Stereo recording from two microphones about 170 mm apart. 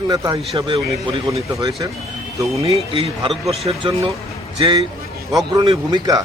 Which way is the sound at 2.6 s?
35° right (ahead or behind).